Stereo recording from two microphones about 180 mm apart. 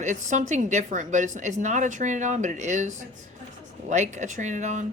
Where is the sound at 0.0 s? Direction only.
40° right (ahead or behind).